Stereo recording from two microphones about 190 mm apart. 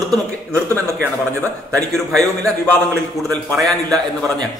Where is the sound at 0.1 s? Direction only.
5° left (ahead or behind).